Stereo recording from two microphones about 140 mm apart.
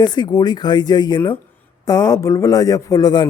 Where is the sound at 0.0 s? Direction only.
30° left (ahead or behind).